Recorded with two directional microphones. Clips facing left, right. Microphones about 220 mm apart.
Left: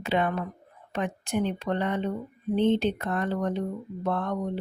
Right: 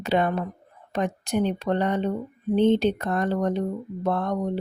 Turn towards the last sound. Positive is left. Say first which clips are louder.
# right 3 dB
turn(degrees=-40)  # may be behind; listen again after turning